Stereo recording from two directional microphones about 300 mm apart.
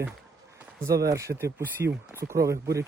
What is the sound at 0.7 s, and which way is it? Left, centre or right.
Speech, centre.